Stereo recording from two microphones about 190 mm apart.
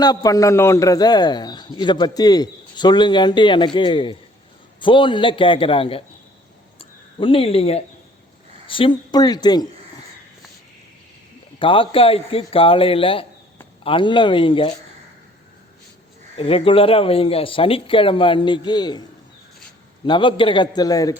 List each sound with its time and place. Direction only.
0.0 s a man's voice: 20° left (ahead or behind)
7.2 s a man's voice: 30° left (ahead or behind)
11.6 s a man's voice: 30° left (ahead or behind)
16.4 s a man's voice: 30° left (ahead or behind)
20.1 s a man's voice: 25° left (ahead or behind)